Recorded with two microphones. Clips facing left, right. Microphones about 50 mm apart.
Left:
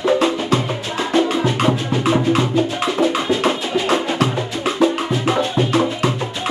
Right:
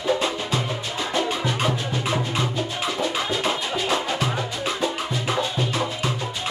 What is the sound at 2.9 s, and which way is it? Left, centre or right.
Music, left.